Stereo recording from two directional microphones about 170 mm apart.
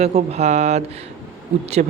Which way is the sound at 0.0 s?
40° right (ahead or behind).